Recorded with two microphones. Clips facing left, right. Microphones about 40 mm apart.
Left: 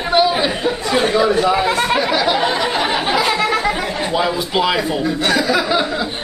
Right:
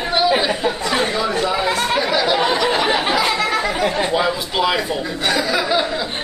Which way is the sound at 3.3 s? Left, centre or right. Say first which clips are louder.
Left 2 dB; centre.